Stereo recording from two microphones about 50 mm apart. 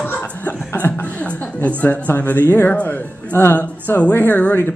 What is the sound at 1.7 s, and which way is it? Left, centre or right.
Speech, left.